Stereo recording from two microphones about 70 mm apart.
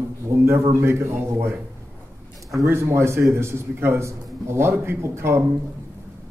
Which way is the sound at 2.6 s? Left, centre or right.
Right.